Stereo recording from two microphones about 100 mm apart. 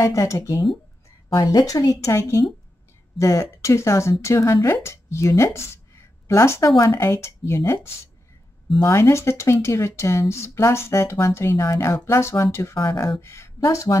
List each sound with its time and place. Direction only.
0.0 s a woman's voice: 35° left (ahead or behind)
12.8 s speech: 45° left (ahead or behind)
13.2 s speech: 25° left (ahead or behind)